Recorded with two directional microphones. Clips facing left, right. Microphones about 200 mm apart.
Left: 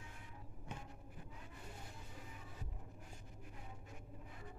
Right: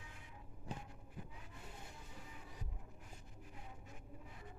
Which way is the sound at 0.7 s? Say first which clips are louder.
Right 3 dB; 35° right (ahead or behind).